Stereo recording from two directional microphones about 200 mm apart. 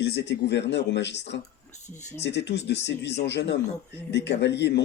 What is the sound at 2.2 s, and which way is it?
Speech, 60° left (ahead or behind).